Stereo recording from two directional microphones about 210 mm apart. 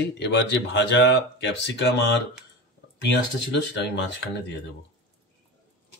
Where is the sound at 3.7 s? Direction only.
55° left (ahead or behind).